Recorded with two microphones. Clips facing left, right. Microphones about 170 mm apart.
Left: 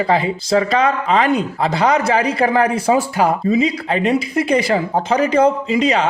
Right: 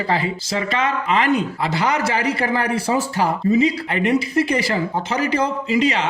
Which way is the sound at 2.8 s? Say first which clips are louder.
Left 4 dB; 15° left (ahead or behind).